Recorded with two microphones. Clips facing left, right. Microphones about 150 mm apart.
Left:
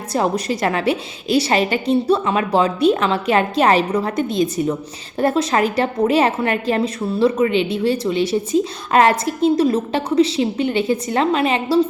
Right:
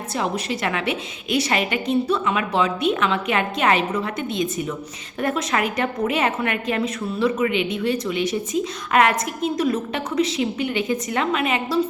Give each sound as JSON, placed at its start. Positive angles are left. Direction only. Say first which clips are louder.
{"t": 0.1, "sound": "a woman's voice", "louder": "left 6 dB", "side_deg": 40}